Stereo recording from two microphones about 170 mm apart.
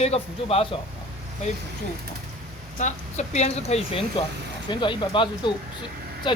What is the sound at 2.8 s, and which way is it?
Speech, 45° left (ahead or behind).